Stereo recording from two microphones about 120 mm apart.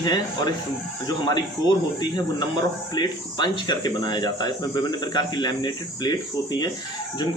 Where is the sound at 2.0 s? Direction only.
35° left (ahead or behind).